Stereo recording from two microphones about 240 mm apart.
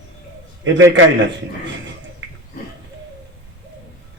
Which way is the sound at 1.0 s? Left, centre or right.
Right.